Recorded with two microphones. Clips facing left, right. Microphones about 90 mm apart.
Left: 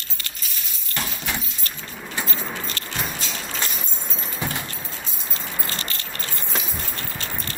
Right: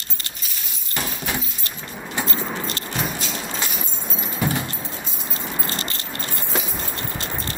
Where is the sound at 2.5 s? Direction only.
20° right (ahead or behind).